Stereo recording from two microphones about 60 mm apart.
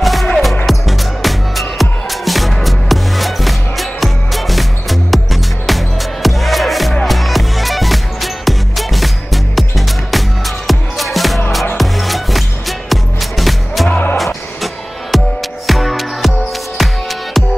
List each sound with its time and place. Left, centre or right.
0.0 s music: centre
13.8 s music: left
14.1 s music: centre